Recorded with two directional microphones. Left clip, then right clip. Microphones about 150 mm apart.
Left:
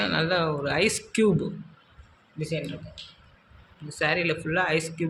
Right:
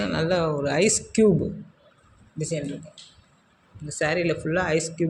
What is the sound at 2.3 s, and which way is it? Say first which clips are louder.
Speech: right 2 dB; 50° right (ahead or behind).